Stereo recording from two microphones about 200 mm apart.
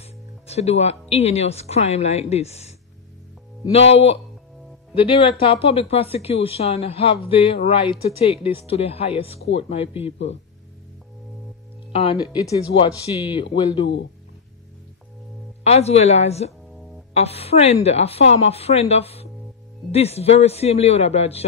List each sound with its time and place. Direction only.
0.0 s speech: 30° left (ahead or behind)
3.7 s a man's voice: 30° left (ahead or behind)
11.9 s speech: 30° left (ahead or behind)
15.6 s a man's voice: 30° left (ahead or behind)